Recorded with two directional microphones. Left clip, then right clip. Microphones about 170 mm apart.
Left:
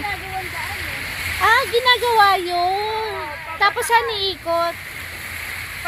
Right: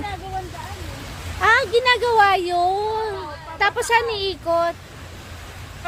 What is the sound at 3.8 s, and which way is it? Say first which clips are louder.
Speech: left 2 dB; 35° right (ahead or behind).